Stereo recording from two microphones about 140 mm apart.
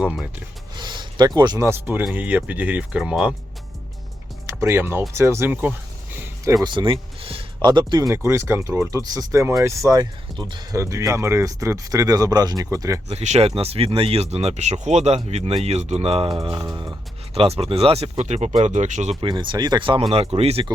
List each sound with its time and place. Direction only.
0.0 s speech: 10° right (ahead or behind)
0.8 s speech: 30° right (ahead or behind); by 3.3 s 10° right (ahead or behind)
4.4 s speech: 20° right (ahead or behind)
6.1 s a sound: 20° right (ahead or behind)
6.7 s speech: 35° right (ahead or behind)
13.1 s speech: 50° right (ahead or behind); by 16.9 s 25° right (ahead or behind)
17.3 s speech: 45° right (ahead or behind)
19.2 s speech: 35° right (ahead or behind)